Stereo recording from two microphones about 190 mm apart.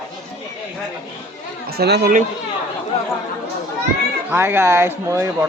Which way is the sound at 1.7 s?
60° right (ahead or behind).